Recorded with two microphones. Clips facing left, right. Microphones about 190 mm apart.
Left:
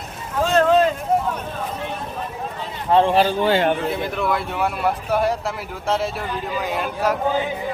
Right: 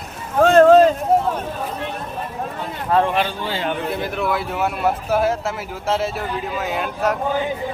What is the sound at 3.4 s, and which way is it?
Speech, 60° left (ahead or behind).